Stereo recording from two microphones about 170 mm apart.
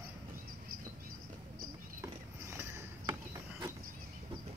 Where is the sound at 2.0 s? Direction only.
15° right (ahead or behind).